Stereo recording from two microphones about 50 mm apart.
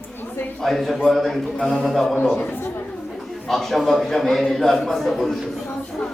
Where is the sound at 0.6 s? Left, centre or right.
Centre.